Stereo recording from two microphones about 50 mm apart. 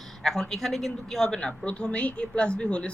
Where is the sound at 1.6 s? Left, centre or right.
Left.